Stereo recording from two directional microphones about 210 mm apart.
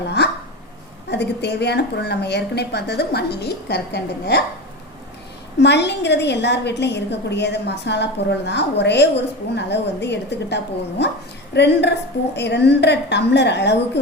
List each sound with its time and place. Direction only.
1.1 s a woman's voice: 55° left (ahead or behind)
5.5 s a woman's voice: 55° left (ahead or behind)